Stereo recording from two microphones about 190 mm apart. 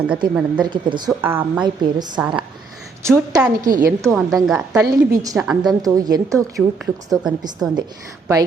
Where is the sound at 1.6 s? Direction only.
25° right (ahead or behind).